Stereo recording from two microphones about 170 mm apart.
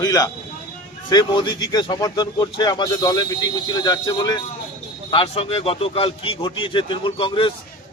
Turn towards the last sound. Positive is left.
turn(degrees=30)  # may be behind; listen again after turning